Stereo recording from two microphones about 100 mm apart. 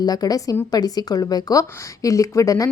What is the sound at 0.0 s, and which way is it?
Speech, 40° left (ahead or behind).